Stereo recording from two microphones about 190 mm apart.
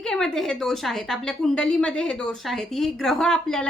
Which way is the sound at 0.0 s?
5° left (ahead or behind).